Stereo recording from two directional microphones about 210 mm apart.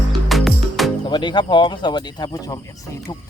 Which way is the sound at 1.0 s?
20° left (ahead or behind).